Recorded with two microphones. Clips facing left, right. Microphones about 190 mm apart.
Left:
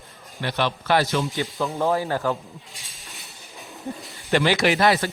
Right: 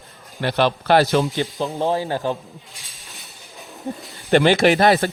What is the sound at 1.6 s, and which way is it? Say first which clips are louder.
Speech: even; 15° right (ahead or behind).